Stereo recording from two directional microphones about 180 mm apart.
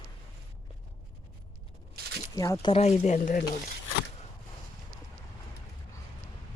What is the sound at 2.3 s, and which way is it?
Speech, 20° left (ahead or behind).